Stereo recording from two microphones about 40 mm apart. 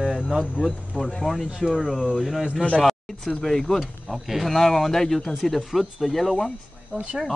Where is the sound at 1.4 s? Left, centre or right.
Centre.